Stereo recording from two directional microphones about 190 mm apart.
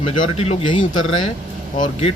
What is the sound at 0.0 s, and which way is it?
Speech, 35° left (ahead or behind).